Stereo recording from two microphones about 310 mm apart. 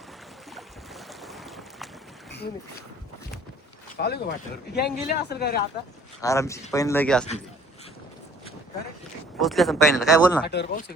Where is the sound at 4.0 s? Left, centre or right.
Left.